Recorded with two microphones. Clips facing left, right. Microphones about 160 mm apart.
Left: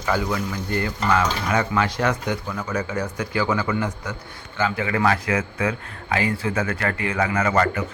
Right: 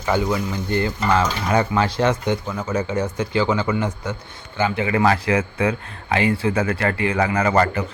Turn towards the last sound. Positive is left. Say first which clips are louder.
# right 2 dB
turn(degrees=-30)  # may be behind; listen again after turning